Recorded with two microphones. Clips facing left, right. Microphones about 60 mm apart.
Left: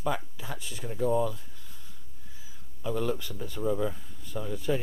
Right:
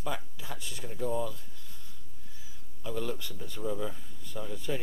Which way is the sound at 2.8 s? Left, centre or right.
Left.